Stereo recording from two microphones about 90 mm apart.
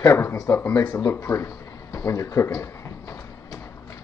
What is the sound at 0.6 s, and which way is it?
Speech, 20° left (ahead or behind).